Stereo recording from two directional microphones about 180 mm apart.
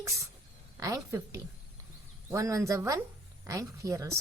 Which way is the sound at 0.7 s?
20° right (ahead or behind).